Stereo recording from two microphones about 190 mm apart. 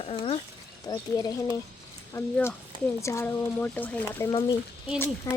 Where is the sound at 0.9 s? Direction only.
20° left (ahead or behind).